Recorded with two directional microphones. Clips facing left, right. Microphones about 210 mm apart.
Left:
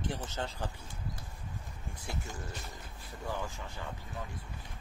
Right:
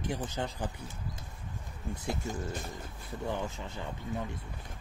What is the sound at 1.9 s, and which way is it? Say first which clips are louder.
Speech: right 7 dB; 20° right (ahead or behind).